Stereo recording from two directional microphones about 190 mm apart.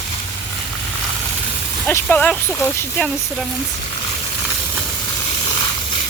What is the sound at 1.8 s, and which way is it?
Speech, 10° left (ahead or behind).